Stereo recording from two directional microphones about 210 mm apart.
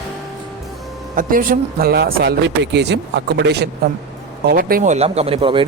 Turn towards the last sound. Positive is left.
turn(degrees=-25)  # may be behind; listen again after turning